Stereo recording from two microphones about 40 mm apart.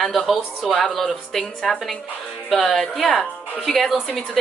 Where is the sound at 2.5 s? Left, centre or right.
Centre.